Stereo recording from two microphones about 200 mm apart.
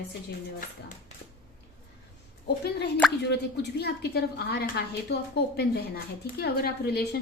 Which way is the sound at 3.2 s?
55° left (ahead or behind).